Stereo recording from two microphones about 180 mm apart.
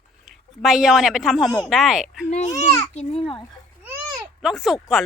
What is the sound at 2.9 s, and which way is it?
Speech, 35° left (ahead or behind).